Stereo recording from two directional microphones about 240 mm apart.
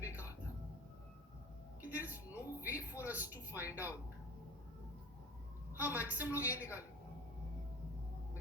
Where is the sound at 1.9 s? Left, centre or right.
Centre.